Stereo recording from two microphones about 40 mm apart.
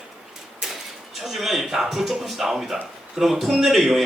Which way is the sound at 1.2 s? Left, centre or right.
Centre.